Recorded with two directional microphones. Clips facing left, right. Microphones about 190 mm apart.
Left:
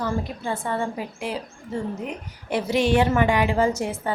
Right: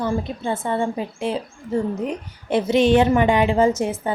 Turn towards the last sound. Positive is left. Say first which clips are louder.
# right 4 dB
turn(degrees=-20)  # may be behind; listen again after turning